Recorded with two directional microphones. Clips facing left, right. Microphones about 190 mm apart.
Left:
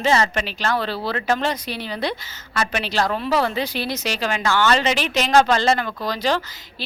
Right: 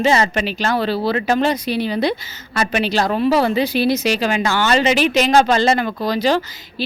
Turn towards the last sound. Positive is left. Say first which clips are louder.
# right 5 dB
turn(degrees=-10)  # may be behind; listen again after turning